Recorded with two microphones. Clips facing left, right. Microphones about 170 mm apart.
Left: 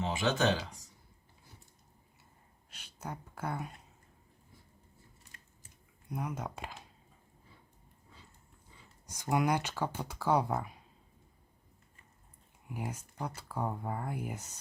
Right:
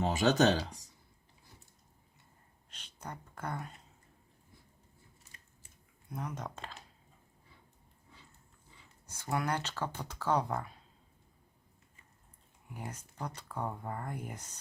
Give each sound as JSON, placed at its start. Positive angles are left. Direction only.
{"t": 0.0, "sound": "speech", "side_deg": -45}
{"t": 2.6, "sound": "a sound", "side_deg": 10}
{"t": 6.1, "sound": "speech", "side_deg": 10}
{"t": 9.0, "sound": "speech", "side_deg": 15}
{"t": 12.7, "sound": "speech", "side_deg": 10}